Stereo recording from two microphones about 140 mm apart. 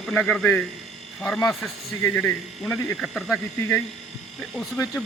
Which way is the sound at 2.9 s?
Centre (ahead or behind).